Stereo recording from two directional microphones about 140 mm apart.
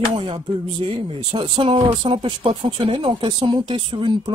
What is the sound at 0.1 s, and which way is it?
Speech, 40° right (ahead or behind).